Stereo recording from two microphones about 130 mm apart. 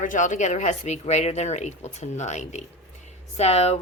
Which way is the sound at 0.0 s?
75° left (ahead or behind).